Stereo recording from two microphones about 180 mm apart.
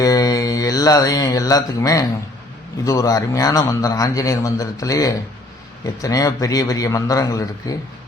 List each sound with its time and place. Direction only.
0.0 s mantra: 20° left (ahead or behind)
2.8 s a man's voice: 20° left (ahead or behind)